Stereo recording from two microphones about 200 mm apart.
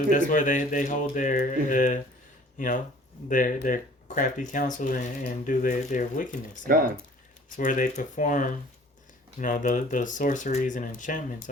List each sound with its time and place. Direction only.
0.1 s speech: 40° left (ahead or behind)
6.7 s speech: 45° right (ahead or behind)
7.5 s speech: 40° left (ahead or behind)